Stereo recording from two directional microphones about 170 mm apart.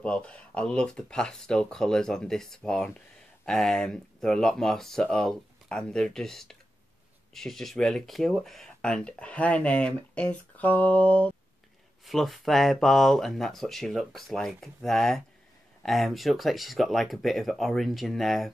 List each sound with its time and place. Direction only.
0.0 s speech: 5° left (ahead or behind)